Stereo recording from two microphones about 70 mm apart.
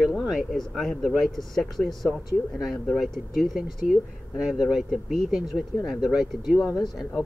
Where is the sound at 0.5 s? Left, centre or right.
Centre.